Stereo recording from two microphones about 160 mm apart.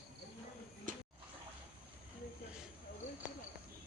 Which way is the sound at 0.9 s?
55° right (ahead or behind).